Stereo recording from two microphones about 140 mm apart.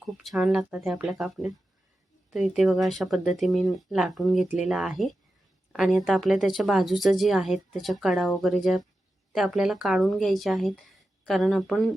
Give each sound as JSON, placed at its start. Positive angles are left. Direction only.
{"t": 0.0, "sound": "a woman's voice", "side_deg": 0}